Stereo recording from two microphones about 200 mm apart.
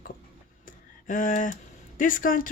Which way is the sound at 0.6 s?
40° left (ahead or behind).